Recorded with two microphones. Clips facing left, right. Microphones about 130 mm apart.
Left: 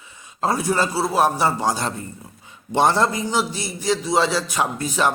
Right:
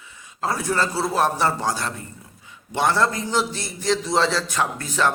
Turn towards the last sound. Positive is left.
turn(degrees=15)  # may be behind; listen again after turning